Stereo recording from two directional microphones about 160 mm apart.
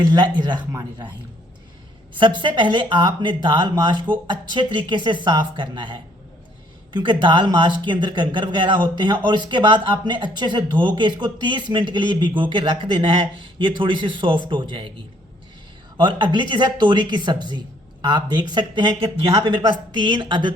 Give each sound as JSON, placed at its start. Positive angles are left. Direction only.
{"t": 0.1, "sound": "speech", "side_deg": -25}
{"t": 2.1, "sound": "a man's voice", "side_deg": -30}
{"t": 16.0, "sound": "speech", "side_deg": -30}